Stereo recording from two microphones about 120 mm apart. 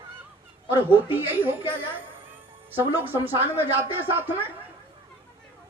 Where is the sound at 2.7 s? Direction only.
15° right (ahead or behind).